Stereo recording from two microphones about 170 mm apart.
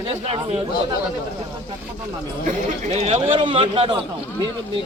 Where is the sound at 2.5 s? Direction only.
40° right (ahead or behind).